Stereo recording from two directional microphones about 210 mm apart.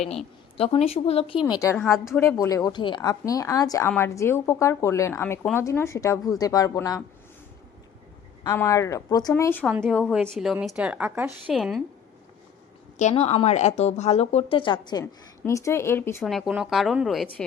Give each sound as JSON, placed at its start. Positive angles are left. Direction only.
{"t": 0.5, "sound": "speech", "side_deg": 25}
{"t": 1.6, "sound": "speech", "side_deg": 10}
{"t": 8.4, "sound": "a woman's voice", "side_deg": 15}
{"t": 13.0, "sound": "speech", "side_deg": 35}
{"t": 16.2, "sound": "a woman's voice", "side_deg": 0}